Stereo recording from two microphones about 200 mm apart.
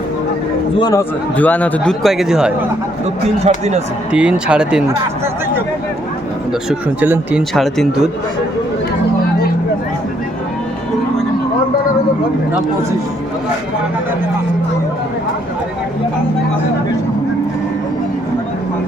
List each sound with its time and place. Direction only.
0.8 s a man's voice: 20° left (ahead or behind)
1.4 s speech: 5° left (ahead or behind)
3.4 s speech: 35° right (ahead or behind)
4.1 s speech: 5° right (ahead or behind)
6.5 s speech: 5° right (ahead or behind)